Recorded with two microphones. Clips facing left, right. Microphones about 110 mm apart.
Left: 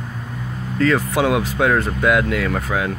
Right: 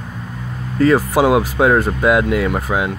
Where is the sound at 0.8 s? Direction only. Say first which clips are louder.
Right 4 dB; 25° right (ahead or behind).